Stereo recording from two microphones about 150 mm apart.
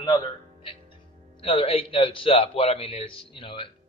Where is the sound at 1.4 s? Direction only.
40° left (ahead or behind).